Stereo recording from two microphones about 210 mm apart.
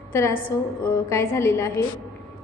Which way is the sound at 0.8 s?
15° left (ahead or behind).